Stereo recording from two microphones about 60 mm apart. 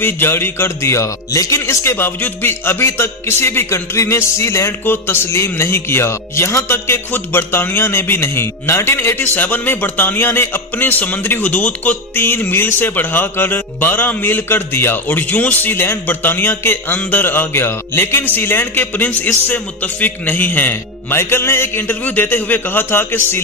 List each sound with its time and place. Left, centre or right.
0.0 s a man's voice: left
2.0 s a man's voice: left
4.8 s a man's voice: left